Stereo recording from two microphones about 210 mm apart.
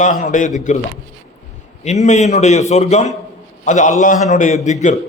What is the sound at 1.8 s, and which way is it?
A man's voice, 35° left (ahead or behind).